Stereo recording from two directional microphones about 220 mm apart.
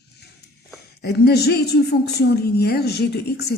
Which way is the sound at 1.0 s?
45° left (ahead or behind).